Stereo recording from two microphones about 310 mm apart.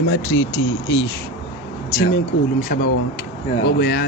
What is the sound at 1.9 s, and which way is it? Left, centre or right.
Speech, left.